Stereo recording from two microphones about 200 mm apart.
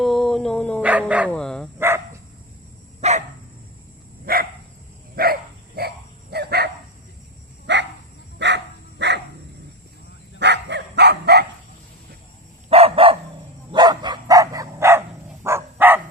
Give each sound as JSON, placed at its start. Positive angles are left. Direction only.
{"t": 0.0, "sound": "dog", "side_deg": 0}
{"t": 0.8, "sound": "dog", "side_deg": -5}
{"t": 3.0, "sound": "dog", "side_deg": -35}
{"t": 4.3, "sound": "dog", "side_deg": -45}
{"t": 7.7, "sound": "dog", "side_deg": -60}
{"t": 10.4, "sound": "dog", "side_deg": -60}
{"t": 12.6, "sound": "dog", "side_deg": -30}